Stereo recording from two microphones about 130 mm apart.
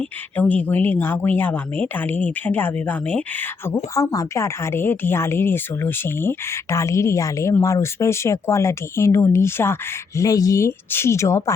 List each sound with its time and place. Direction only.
0.0 s speech: 10° left (ahead or behind)
3.9 s speech: 25° left (ahead or behind)